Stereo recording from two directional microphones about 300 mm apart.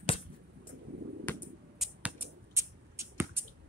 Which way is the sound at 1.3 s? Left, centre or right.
Centre.